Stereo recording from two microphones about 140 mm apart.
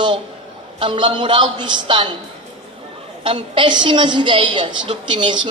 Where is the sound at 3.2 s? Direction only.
40° right (ahead or behind).